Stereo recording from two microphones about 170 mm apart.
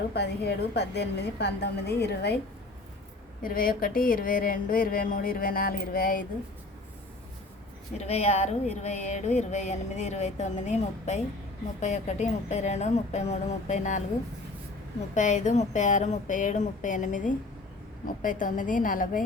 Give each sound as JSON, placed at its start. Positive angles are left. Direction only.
{"t": 0.1, "sound": "a woman's voice", "side_deg": 75}
{"t": 3.4, "sound": "speech", "side_deg": 60}
{"t": 7.9, "sound": "speech", "side_deg": 40}
{"t": 15.1, "sound": "speech", "side_deg": 45}